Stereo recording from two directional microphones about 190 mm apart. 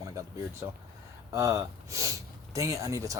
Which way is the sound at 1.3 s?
15° right (ahead or behind).